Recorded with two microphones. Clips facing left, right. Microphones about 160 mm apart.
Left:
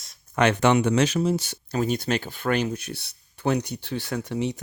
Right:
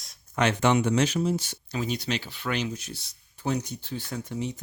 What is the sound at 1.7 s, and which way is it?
Speech, 50° left (ahead or behind).